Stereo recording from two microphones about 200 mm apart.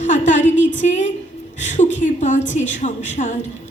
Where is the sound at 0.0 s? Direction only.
35° left (ahead or behind).